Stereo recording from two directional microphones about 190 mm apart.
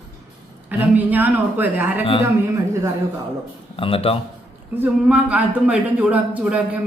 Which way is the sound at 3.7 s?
30° left (ahead or behind).